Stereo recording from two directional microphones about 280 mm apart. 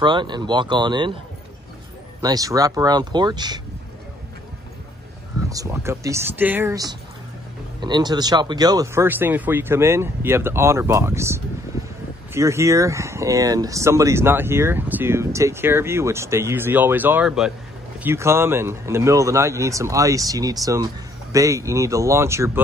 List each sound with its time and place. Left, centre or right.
0.0 s speech: centre
2.2 s speech: centre
5.5 s speech: centre
11.7 s a sound: centre
12.4 s speech: centre